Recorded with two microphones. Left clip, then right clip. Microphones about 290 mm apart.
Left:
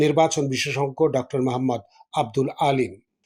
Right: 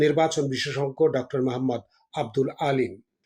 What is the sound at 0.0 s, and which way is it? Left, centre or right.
Speech, centre.